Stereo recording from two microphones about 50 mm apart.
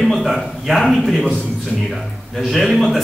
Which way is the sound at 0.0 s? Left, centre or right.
Centre.